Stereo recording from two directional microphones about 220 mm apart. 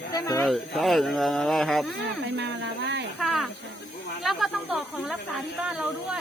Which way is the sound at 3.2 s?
Centre (ahead or behind).